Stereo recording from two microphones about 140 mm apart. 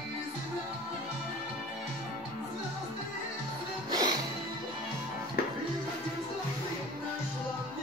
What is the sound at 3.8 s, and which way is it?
Music, 30° right (ahead or behind).